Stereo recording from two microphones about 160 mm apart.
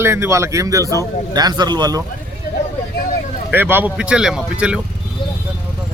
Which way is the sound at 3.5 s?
15° right (ahead or behind).